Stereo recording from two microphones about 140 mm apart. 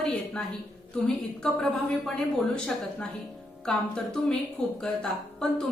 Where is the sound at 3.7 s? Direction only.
5° left (ahead or behind).